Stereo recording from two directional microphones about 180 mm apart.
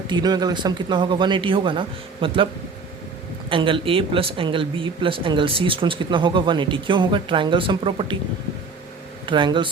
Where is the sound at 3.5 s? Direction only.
30° right (ahead or behind).